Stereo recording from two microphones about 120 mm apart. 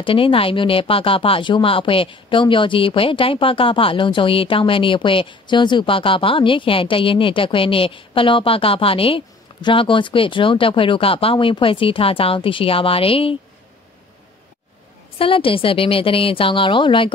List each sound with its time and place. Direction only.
0.0 s speech: 50° left (ahead or behind)
15.1 s speech: 50° left (ahead or behind)